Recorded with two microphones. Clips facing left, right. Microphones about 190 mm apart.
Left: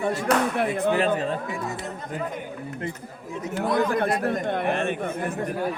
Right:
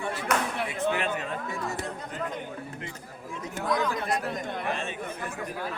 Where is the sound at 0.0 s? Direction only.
40° left (ahead or behind).